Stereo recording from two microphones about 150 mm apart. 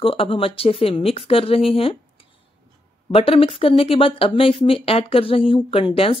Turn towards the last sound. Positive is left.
turn(degrees=35)  # may be behind; listen again after turning